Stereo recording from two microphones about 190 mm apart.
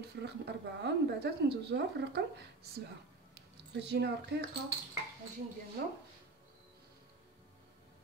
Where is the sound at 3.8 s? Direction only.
60° right (ahead or behind).